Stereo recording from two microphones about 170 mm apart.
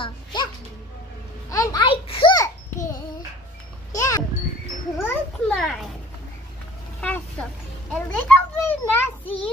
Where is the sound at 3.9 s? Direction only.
20° left (ahead or behind).